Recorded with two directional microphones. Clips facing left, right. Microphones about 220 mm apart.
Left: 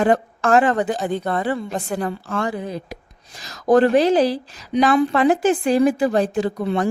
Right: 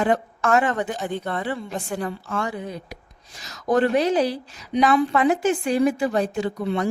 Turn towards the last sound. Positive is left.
turn(degrees=35)  # may be behind; listen again after turning